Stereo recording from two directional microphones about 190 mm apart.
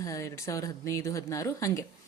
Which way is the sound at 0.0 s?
15° left (ahead or behind).